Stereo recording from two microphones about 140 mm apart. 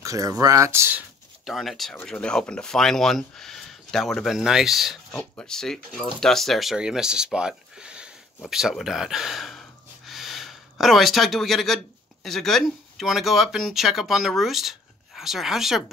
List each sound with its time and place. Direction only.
0.0 s speech: 25° right (ahead or behind)
1.4 s speech: centre (ahead or behind)
5.1 s speech: 10° left (ahead or behind)